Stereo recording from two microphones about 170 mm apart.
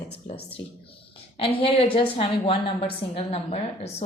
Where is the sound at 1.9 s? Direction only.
35° left (ahead or behind).